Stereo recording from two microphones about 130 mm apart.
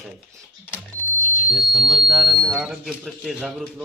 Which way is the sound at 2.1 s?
35° right (ahead or behind).